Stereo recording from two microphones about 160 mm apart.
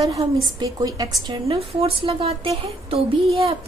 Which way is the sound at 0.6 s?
25° right (ahead or behind).